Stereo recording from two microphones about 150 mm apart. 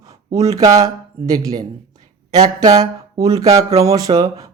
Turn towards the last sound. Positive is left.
turn(degrees=-25)  # may be behind; listen again after turning